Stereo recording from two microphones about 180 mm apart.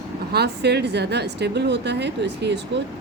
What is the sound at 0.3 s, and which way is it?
A woman's voice, 65° right (ahead or behind).